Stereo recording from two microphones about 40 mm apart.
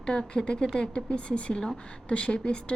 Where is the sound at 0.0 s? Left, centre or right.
Centre.